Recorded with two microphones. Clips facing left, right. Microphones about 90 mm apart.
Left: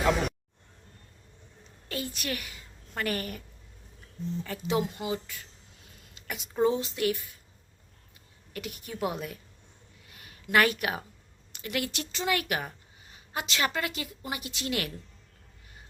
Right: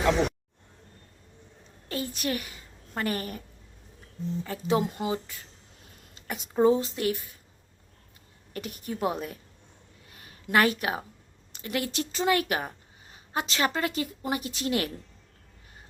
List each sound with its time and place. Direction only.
0.0 s speech: centre (ahead or behind)
1.9 s a woman's voice: 35° right (ahead or behind)
4.4 s speech: 35° right (ahead or behind)
6.1 s a sound: 35° right (ahead or behind)
6.6 s speech: 35° right (ahead or behind)
8.5 s speech: 35° right (ahead or behind)
10.1 s a sound: 35° right (ahead or behind)
11.5 s a woman's voice: 30° right (ahead or behind)